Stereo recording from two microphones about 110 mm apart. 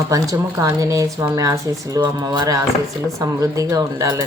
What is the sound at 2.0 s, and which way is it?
Speech, 40° right (ahead or behind).